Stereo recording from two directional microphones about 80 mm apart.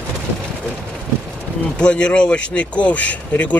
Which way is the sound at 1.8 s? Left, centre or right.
Centre.